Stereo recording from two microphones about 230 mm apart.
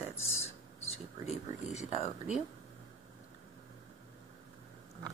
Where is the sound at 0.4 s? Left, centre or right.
Left.